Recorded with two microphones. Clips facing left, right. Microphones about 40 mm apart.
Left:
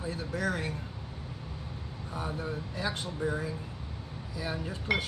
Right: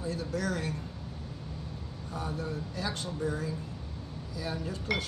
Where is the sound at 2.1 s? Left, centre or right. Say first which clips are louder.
Even; centre.